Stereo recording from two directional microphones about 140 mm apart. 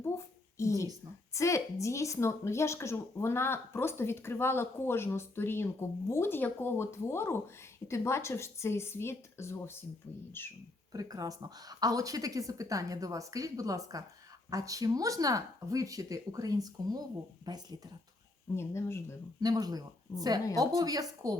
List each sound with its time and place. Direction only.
0.6 s a sound: 20° left (ahead or behind)
1.3 s speech: 20° left (ahead or behind)
10.9 s speech: 25° right (ahead or behind)
18.5 s speech: 20° left (ahead or behind)
19.4 s speech: 25° right (ahead or behind)